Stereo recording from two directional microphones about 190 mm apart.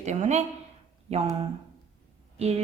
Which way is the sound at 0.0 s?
35° right (ahead or behind).